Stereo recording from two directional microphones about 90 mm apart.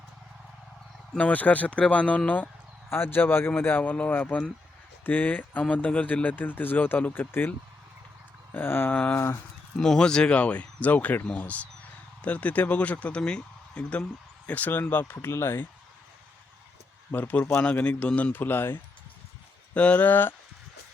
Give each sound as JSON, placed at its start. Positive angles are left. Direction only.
{"t": 1.1, "sound": "speech", "side_deg": 15}
{"t": 8.5, "sound": "speech", "side_deg": 25}
{"t": 9.7, "sound": "speech", "side_deg": 5}
{"t": 17.1, "sound": "speech", "side_deg": 20}